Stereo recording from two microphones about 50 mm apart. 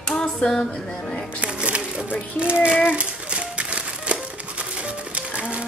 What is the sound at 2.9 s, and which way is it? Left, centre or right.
Crumpling, right.